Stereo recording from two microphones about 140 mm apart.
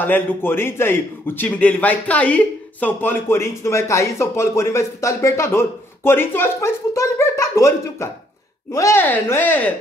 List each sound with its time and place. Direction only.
0.0 s a man's voice: 15° left (ahead or behind)